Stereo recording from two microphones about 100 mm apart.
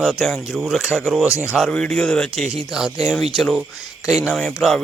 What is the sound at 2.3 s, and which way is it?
Speech, 5° right (ahead or behind).